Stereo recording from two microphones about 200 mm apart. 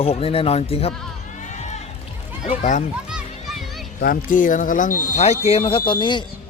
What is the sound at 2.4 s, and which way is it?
Speech, 35° left (ahead or behind).